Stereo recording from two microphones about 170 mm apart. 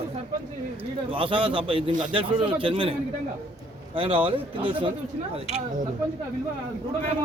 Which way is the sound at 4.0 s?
30° right (ahead or behind).